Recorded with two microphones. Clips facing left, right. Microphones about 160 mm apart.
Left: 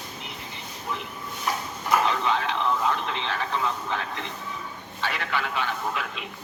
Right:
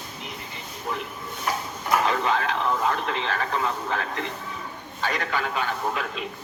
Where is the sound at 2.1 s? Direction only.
45° right (ahead or behind).